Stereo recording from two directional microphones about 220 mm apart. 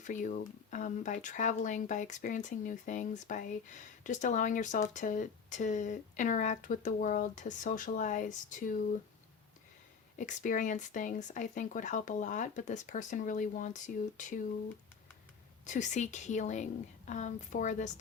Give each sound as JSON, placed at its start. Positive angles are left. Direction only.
{"t": 0.0, "sound": "speech", "side_deg": 35}
{"t": 10.2, "sound": "speech", "side_deg": 35}
{"t": 15.6, "sound": "speech", "side_deg": 35}